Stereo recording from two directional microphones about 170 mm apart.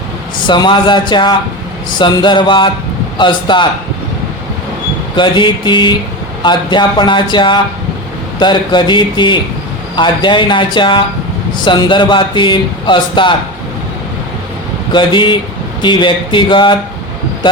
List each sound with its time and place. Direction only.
0.4 s a man's voice: 25° left (ahead or behind)
5.1 s a man's voice: 30° left (ahead or behind)
14.9 s a man's voice: 25° left (ahead or behind)